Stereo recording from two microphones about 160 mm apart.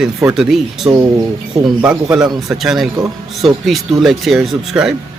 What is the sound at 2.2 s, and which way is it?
Speech, 25° right (ahead or behind).